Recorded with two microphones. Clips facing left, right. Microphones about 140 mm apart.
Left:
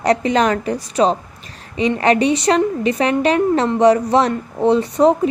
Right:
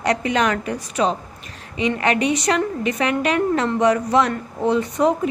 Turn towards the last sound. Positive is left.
turn(degrees=30)  # may be behind; listen again after turning